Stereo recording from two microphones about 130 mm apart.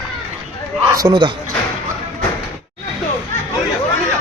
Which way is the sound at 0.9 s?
30° right (ahead or behind).